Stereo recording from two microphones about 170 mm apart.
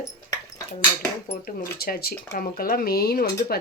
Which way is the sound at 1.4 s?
60° left (ahead or behind).